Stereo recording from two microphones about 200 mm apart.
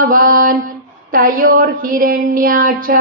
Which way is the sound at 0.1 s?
45° right (ahead or behind).